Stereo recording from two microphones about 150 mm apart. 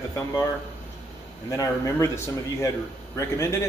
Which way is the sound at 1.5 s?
20° left (ahead or behind).